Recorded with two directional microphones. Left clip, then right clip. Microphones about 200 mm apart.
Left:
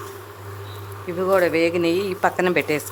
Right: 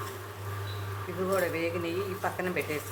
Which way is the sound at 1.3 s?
55° left (ahead or behind).